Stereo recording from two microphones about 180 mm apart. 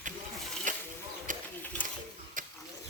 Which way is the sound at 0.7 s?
45° right (ahead or behind).